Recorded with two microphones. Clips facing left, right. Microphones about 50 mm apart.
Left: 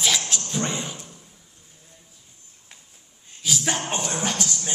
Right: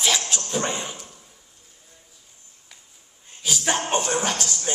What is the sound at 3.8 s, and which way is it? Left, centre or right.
Music, right.